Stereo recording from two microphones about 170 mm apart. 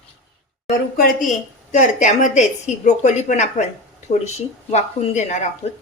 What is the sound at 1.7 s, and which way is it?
A woman's voice, 45° left (ahead or behind).